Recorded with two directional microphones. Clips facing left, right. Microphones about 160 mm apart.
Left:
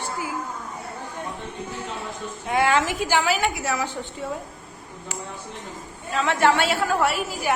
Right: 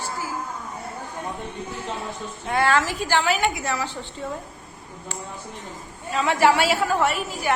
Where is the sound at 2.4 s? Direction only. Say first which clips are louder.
Even; 15° left (ahead or behind).